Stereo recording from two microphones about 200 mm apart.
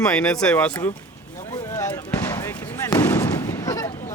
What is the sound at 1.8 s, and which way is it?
Basketball bounce, 15° left (ahead or behind).